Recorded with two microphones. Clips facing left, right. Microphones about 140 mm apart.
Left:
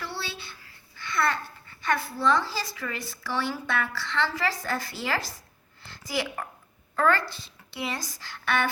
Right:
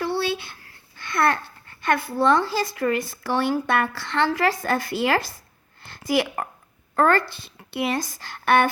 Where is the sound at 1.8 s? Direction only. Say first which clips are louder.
Right 5 dB; 55° right (ahead or behind).